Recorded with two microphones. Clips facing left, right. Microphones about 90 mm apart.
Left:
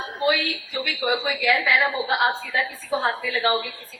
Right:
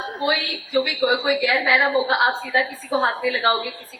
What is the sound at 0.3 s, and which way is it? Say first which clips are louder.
A woman's voice: left 2 dB; 35° right (ahead or behind).